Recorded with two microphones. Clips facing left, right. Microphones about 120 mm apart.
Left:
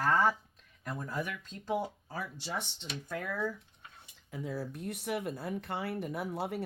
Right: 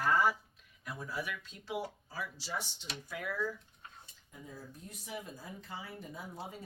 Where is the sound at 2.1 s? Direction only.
60° left (ahead or behind).